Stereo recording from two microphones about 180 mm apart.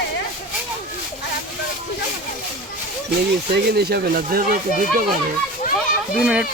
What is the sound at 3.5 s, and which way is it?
Speech, 65° right (ahead or behind).